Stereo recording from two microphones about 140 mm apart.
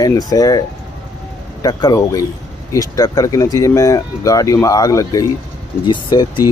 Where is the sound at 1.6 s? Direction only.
25° left (ahead or behind).